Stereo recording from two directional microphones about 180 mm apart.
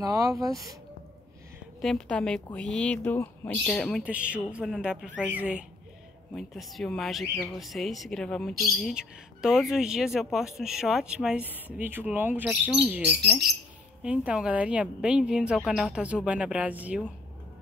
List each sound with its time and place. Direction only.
0.0 s speech: 20° right (ahead or behind)
1.8 s speech: 5° left (ahead or behind)